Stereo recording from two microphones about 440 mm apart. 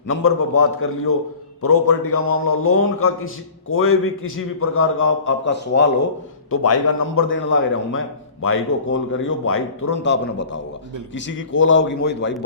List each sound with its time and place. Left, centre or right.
0.1 s a man's voice: left